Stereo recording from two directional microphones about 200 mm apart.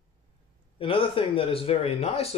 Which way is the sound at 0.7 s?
25° left (ahead or behind).